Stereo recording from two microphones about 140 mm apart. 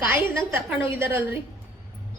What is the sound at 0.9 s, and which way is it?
Speech, 15° right (ahead or behind).